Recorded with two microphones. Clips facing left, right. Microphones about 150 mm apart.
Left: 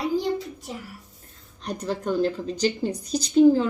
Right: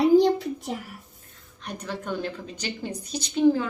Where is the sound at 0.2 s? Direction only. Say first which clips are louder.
Right 6 dB; 65° right (ahead or behind).